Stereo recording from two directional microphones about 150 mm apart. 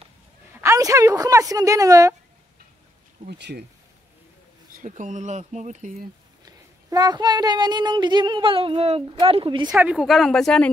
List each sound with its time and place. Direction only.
0.5 s a woman's voice: 15° right (ahead or behind)
3.2 s speech: 55° right (ahead or behind)
4.8 s speech: 55° right (ahead or behind)
6.4 s speech: 25° right (ahead or behind)
9.7 s a woman's voice: 5° right (ahead or behind)